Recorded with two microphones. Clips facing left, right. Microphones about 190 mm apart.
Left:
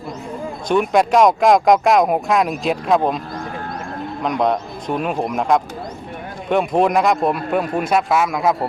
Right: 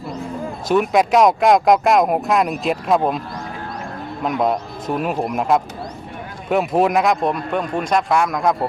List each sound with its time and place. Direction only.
0.7 s speech: centre (ahead or behind)
4.2 s speech: 5° right (ahead or behind)